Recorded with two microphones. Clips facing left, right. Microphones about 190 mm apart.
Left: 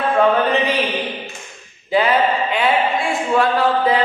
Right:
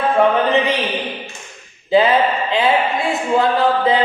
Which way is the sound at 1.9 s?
25° right (ahead or behind).